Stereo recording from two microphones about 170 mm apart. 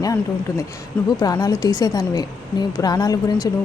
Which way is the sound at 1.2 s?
20° left (ahead or behind).